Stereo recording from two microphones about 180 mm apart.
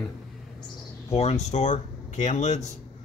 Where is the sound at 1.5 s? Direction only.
40° left (ahead or behind).